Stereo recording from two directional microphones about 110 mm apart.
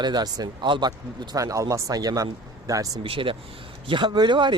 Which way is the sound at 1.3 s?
30° right (ahead or behind).